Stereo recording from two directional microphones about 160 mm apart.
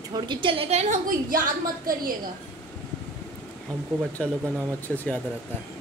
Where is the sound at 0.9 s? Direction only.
60° right (ahead or behind).